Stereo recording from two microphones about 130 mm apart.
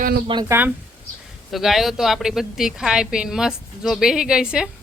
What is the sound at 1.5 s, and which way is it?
A woman's voice, centre (ahead or behind).